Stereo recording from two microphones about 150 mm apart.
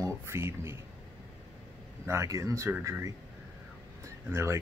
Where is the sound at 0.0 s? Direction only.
15° right (ahead or behind).